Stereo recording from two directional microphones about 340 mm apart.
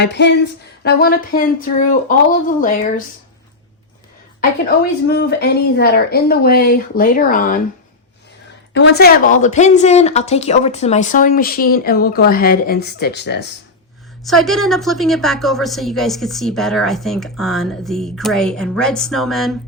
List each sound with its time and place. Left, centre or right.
0.0 s speech: left
5.0 s speech: left
8.7 s speech: left
14.3 s a woman's voice: centre